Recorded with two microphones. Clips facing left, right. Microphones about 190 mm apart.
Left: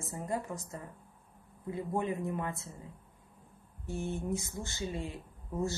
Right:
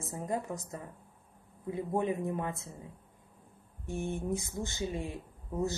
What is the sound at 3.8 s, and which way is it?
A woman's voice, 15° right (ahead or behind).